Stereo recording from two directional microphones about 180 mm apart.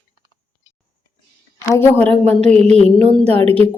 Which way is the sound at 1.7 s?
10° left (ahead or behind).